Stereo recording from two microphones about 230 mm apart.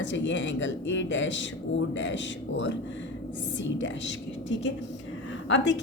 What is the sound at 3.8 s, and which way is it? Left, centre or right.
A woman's voice, left.